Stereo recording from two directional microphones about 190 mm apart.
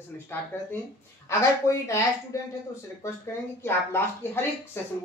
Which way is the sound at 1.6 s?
15° left (ahead or behind).